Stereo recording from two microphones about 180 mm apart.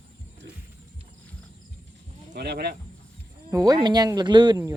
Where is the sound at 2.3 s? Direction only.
65° right (ahead or behind).